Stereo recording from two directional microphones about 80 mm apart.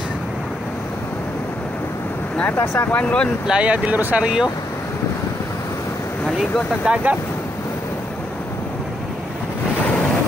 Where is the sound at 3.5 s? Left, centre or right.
Centre.